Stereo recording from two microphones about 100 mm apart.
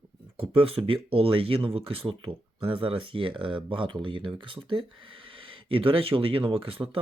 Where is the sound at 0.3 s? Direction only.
65° right (ahead or behind).